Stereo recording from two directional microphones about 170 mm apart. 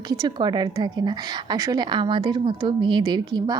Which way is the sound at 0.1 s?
25° right (ahead or behind).